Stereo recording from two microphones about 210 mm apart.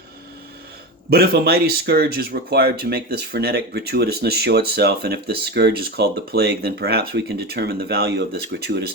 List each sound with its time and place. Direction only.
1.1 s speech: 50° right (ahead or behind)